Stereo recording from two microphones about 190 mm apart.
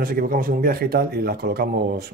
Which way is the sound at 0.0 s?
50° right (ahead or behind).